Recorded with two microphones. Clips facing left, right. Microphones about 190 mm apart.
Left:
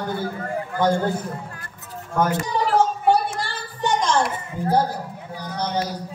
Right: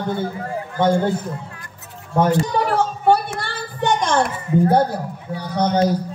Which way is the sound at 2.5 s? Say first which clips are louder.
Even; 60° right (ahead or behind).